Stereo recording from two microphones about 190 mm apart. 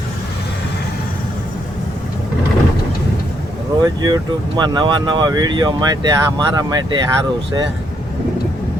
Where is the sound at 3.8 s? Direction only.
20° right (ahead or behind).